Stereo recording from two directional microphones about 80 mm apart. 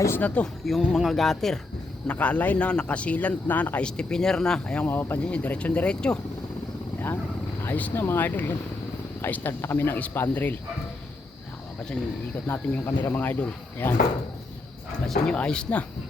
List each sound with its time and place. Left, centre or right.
0.2 s a man's voice: centre
0.6 s speech: centre
2.0 s a man's voice: centre
4.9 s speech: left
5.2 s a man's voice: centre
7.6 s speech: left
12.5 s speech: left
15.0 s a man's voice: centre